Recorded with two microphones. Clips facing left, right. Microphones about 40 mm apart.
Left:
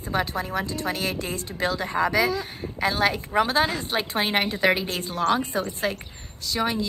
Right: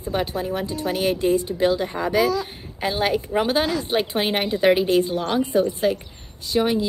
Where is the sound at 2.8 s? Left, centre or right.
Centre.